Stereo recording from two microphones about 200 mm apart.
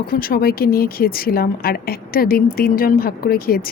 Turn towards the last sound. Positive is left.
turn(degrees=45)  # may be behind; listen again after turning